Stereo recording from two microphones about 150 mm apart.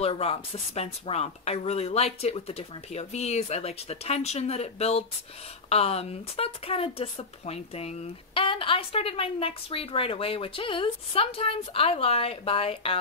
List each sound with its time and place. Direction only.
0.0 s speech: 40° left (ahead or behind)